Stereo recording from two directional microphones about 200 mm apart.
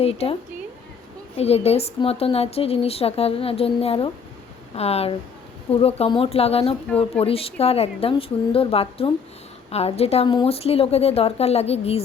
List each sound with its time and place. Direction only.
0.0 s speech: 30° left (ahead or behind)
1.4 s a woman's voice: 30° left (ahead or behind)